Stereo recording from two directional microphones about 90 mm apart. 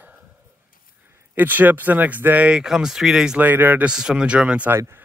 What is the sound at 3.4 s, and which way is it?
Speech, 20° right (ahead or behind).